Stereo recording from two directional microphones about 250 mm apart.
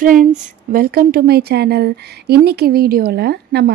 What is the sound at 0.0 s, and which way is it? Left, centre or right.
A woman's voice, right.